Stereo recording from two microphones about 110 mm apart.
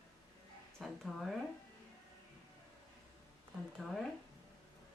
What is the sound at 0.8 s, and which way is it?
Speech, centre (ahead or behind).